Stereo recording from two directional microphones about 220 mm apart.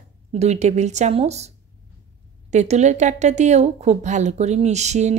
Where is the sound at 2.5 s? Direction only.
30° right (ahead or behind).